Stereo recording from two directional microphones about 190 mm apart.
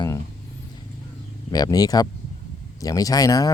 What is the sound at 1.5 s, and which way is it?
Speech, 20° left (ahead or behind).